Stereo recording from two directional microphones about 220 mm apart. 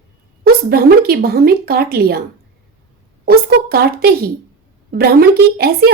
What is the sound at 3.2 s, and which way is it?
A woman's voice, 45° right (ahead or behind).